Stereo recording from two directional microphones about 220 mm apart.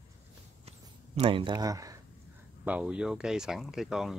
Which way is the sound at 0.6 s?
30° right (ahead or behind).